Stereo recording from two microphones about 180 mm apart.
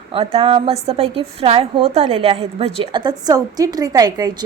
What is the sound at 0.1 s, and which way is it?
A woman's voice, 35° right (ahead or behind).